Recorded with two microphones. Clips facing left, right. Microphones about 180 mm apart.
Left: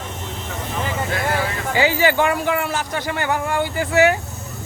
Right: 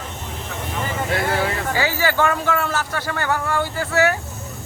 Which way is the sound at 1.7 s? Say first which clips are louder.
Left 7 dB; 20° left (ahead or behind).